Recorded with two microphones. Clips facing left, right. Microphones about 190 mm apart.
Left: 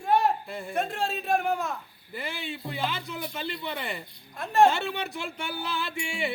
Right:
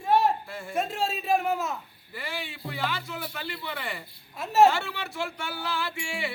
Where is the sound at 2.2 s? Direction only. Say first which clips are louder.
Left 1 dB; 20° left (ahead or behind).